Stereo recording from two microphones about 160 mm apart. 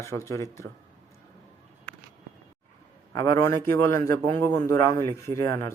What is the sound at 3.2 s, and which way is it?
Speech, 20° left (ahead or behind).